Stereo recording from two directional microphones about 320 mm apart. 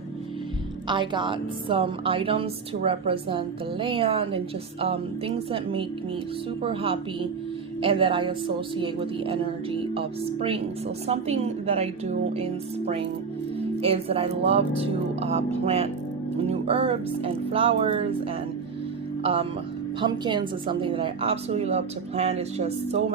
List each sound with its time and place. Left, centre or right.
0.9 s a woman's voice: centre